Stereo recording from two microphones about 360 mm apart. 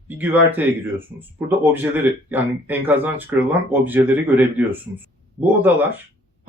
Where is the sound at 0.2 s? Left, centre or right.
Centre.